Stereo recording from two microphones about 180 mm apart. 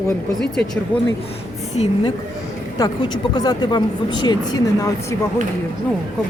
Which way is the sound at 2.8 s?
25° left (ahead or behind).